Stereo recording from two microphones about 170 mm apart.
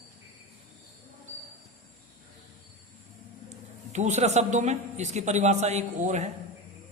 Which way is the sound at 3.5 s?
45° right (ahead or behind).